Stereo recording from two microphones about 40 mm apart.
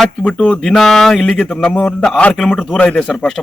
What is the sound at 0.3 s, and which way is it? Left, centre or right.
Speech, centre.